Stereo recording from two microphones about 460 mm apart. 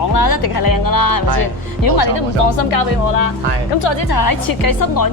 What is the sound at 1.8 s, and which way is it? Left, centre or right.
Speech, left.